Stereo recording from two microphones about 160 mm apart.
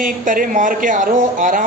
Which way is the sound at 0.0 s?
55° right (ahead or behind).